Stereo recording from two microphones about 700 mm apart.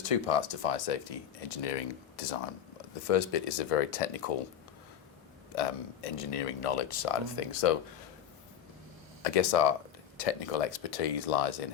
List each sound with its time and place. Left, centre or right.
0.0 s speech: left
5.5 s speech: left
9.2 s speech: left